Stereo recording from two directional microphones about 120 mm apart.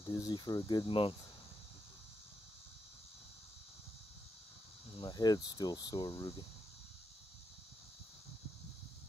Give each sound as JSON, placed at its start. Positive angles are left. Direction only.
{"t": 0.0, "sound": "cricket", "side_deg": 30}
{"t": 4.9, "sound": "cricket", "side_deg": 40}